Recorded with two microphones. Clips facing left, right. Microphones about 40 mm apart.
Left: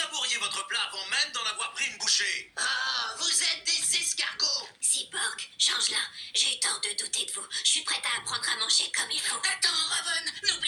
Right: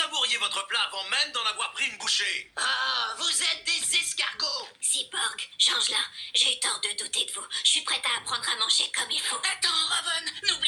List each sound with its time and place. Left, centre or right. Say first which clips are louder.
0.0 s speech: right 4 dB; right